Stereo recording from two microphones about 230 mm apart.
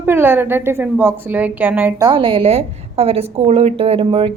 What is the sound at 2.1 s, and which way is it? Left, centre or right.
A woman's voice, right.